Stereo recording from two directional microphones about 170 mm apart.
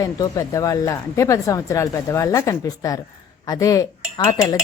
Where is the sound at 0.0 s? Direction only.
20° left (ahead or behind).